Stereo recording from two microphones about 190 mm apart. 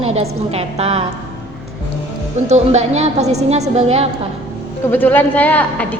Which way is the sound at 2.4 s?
35° right (ahead or behind).